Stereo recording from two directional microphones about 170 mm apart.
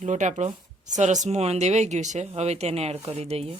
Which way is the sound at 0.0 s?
45° right (ahead or behind).